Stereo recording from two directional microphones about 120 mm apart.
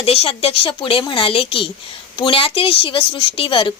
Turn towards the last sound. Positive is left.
turn(degrees=45)  # may be behind; listen again after turning